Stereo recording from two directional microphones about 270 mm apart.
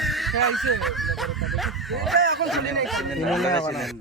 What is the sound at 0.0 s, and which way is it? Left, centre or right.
Speech, centre.